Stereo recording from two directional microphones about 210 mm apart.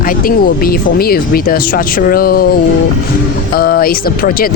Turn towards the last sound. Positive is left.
turn(degrees=45)  # may be behind; listen again after turning